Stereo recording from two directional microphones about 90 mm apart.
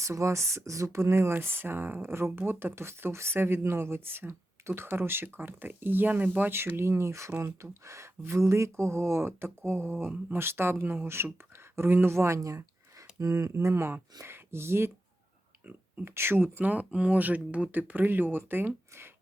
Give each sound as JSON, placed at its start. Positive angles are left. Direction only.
{"t": 0.0, "sound": "speech", "side_deg": -35}